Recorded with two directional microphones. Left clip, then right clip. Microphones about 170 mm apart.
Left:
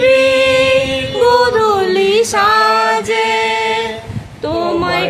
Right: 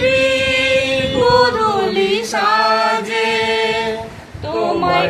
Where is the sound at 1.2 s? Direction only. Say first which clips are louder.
Left 3 dB; 50° left (ahead or behind).